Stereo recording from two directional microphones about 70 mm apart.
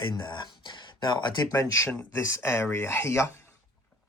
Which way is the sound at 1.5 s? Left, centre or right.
Left.